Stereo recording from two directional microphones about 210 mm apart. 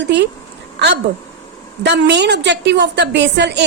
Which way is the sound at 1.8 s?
55° right (ahead or behind).